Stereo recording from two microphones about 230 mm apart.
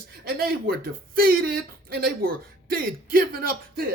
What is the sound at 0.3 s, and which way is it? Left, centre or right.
Speech, right.